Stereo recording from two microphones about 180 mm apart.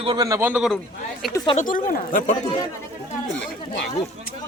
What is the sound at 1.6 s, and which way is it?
Speech, 45° left (ahead or behind).